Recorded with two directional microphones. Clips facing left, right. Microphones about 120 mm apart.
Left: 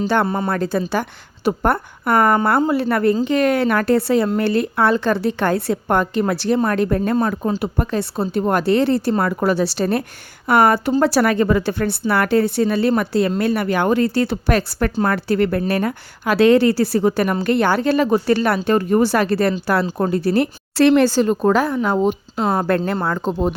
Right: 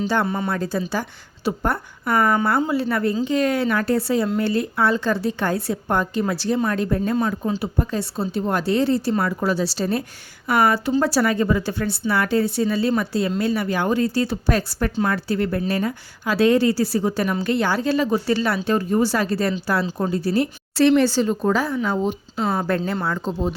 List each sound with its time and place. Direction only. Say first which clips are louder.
0.3 s speech: left 3 dB; 40° left (ahead or behind)
0.5 s speech: left 4 dB; 60° left (ahead or behind)